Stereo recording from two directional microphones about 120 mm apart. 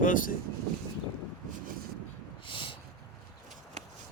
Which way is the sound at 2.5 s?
45° left (ahead or behind).